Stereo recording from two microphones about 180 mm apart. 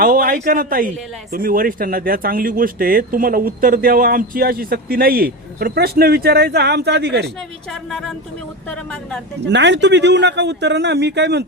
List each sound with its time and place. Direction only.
0.0 s a man's voice: 50° right (ahead or behind); by 7.3 s 65° right (ahead or behind)
7.7 s speech: 5° left (ahead or behind)
9.5 s speech: 75° right (ahead or behind)